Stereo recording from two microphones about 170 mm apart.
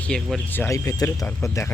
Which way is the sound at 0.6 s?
20° left (ahead or behind).